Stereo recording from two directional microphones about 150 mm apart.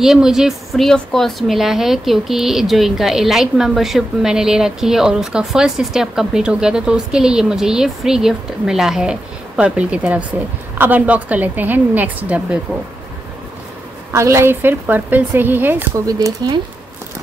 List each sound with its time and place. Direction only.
0.0 s a woman's voice: 5° right (ahead or behind)
14.1 s a woman's voice: 20° right (ahead or behind)
16.1 s speech: 25° right (ahead or behind)